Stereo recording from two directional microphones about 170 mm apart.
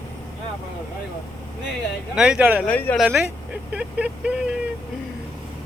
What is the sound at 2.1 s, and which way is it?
Speech, 5° right (ahead or behind).